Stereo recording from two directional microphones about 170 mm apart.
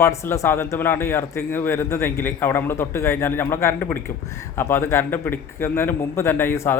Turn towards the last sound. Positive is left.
turn(degrees=15)  # may be behind; listen again after turning